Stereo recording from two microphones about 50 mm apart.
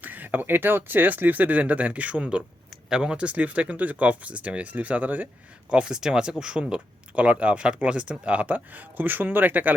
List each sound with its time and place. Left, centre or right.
0.0 s speech: right
2.9 s speech: centre
3.2 s speech: right
5.7 s speech: centre; by 9.7 s right